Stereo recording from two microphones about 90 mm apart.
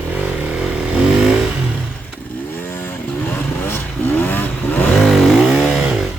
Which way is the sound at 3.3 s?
20° left (ahead or behind).